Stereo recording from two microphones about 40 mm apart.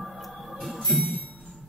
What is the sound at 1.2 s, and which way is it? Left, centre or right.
Music, left.